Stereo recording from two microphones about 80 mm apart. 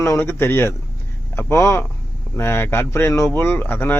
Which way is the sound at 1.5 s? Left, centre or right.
Left.